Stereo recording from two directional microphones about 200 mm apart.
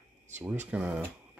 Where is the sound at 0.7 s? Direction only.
5° right (ahead or behind).